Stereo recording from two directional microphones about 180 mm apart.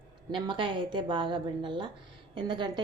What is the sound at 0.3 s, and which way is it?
A woman's voice, 25° right (ahead or behind).